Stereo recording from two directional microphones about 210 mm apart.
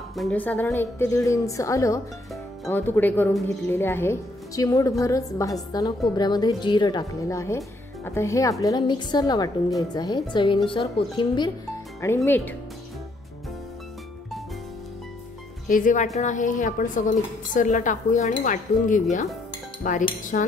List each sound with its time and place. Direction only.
0.1 s a woman's voice: 5° left (ahead or behind); by 11.5 s 20° left (ahead or behind)
12.2 s speech: 10° left (ahead or behind)
15.7 s speech: 40° left (ahead or behind)